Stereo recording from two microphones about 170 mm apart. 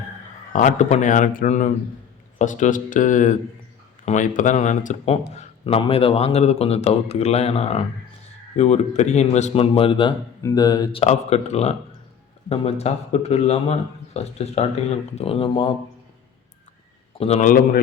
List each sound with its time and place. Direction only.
0.5 s speech: 45° left (ahead or behind); by 11.0 s 25° left (ahead or behind)
11.0 s speech: 40° left (ahead or behind)
17.2 s speech: 40° left (ahead or behind)